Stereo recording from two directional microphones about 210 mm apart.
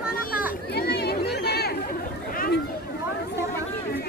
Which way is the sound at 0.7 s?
50° left (ahead or behind).